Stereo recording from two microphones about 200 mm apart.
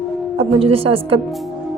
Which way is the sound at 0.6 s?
30° right (ahead or behind).